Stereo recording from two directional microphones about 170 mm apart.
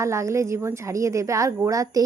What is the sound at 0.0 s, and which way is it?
A woman's voice, 15° right (ahead or behind).